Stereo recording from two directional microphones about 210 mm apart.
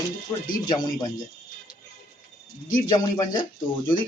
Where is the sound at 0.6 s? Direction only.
20° left (ahead or behind).